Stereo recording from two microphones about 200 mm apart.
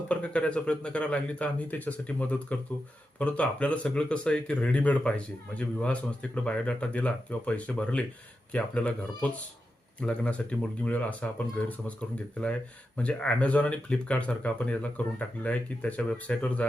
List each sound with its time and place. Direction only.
0.1 s speech: 5° left (ahead or behind)